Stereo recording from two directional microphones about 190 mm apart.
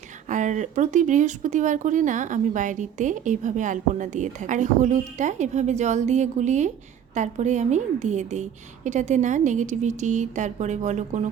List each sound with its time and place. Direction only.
0.3 s speech: 40° right (ahead or behind)